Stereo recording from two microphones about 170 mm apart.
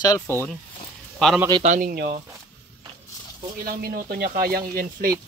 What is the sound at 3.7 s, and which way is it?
Speech, 60° right (ahead or behind).